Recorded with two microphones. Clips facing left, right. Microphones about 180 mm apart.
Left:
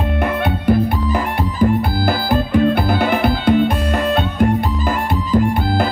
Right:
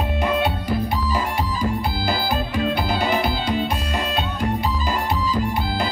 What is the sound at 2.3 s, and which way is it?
Music, 55° left (ahead or behind).